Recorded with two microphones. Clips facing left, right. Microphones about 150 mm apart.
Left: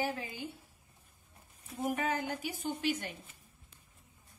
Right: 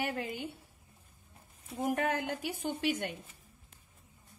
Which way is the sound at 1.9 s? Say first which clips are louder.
Right 1 dB; 65° right (ahead or behind).